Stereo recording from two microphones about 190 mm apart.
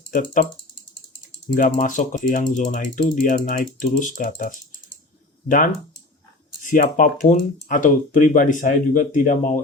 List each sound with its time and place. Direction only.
0.1 s speech: 45° left (ahead or behind)
1.5 s speech: 45° left (ahead or behind)
6.6 s speech: 45° left (ahead or behind)